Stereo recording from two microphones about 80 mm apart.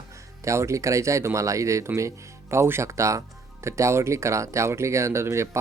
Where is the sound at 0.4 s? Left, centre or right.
Right.